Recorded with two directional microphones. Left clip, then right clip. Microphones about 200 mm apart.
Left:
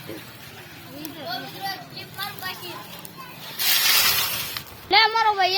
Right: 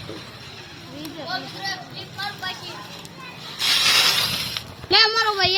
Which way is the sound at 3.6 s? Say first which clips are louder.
Right 3 dB; 5° left (ahead or behind).